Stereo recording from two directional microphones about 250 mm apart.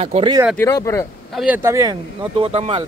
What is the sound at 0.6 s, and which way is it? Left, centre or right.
Speech, centre.